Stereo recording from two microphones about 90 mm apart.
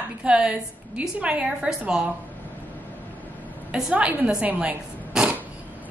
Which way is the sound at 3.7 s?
10° right (ahead or behind).